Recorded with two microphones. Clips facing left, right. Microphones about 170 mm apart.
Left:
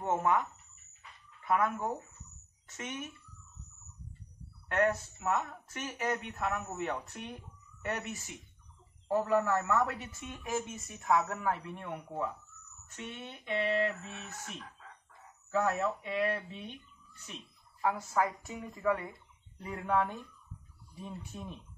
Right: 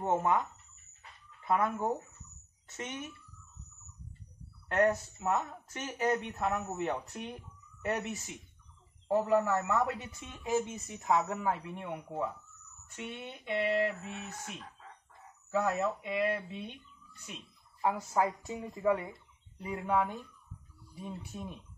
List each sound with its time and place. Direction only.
0.0 s speech: 20° right (ahead or behind)
1.4 s speech: 30° right (ahead or behind)
4.6 s a man's voice: 30° right (ahead or behind)
15.5 s a man's voice: 10° right (ahead or behind)
17.8 s speech: 20° right (ahead or behind)
19.6 s a man's voice: 10° right (ahead or behind)